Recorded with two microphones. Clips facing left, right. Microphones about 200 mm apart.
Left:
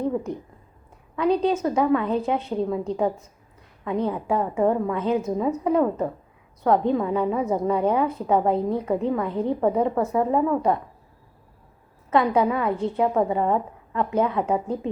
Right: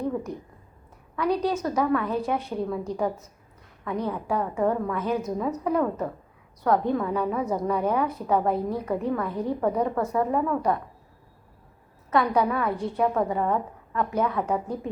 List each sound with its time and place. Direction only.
1.1 s a woman's voice: 25° left (ahead or behind)
3.8 s a woman's voice: 25° left (ahead or behind)
12.1 s a woman's voice: 25° left (ahead or behind)